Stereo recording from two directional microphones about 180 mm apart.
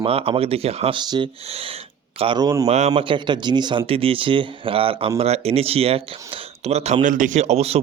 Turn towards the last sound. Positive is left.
turn(degrees=-35)  # may be behind; listen again after turning